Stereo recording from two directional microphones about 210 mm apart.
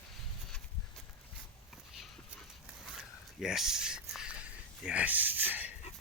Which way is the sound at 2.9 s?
Centre (ahead or behind).